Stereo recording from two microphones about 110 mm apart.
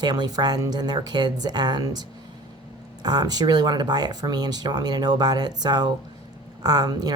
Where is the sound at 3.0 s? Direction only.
40° right (ahead or behind).